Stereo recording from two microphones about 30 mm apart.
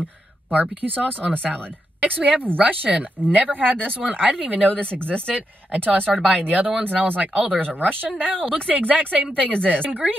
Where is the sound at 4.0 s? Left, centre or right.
Right.